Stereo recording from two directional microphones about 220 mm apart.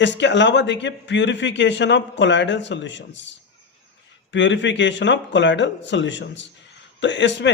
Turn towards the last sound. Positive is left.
turn(degrees=55)  # may be behind; listen again after turning